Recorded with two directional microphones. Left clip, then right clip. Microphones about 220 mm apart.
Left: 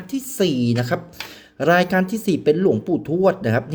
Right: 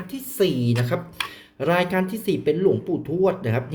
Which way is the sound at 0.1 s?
20° left (ahead or behind).